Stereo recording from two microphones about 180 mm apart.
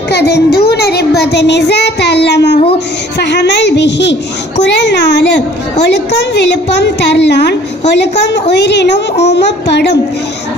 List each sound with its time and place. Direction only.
0.1 s child singing: 65° left (ahead or behind)